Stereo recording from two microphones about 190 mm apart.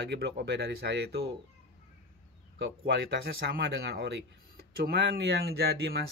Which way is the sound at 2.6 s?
65° right (ahead or behind).